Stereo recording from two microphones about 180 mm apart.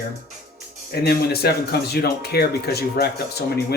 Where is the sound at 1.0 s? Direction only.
60° left (ahead or behind).